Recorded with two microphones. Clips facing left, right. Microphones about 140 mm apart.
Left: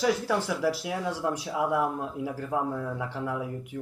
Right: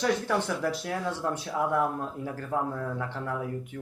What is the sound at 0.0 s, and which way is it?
Speech, 5° left (ahead or behind).